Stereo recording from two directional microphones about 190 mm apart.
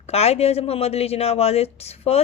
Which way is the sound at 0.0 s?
35° left (ahead or behind).